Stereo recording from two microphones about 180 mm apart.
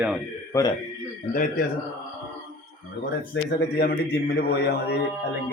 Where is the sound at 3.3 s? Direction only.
65° left (ahead or behind).